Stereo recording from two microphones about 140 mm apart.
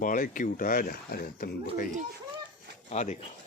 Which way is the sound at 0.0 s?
70° left (ahead or behind).